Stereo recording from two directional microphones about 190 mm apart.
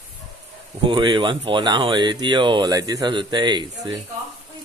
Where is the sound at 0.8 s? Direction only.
25° right (ahead or behind).